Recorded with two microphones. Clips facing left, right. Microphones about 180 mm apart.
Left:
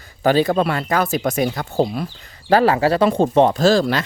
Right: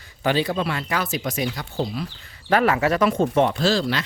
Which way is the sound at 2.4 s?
30° left (ahead or behind).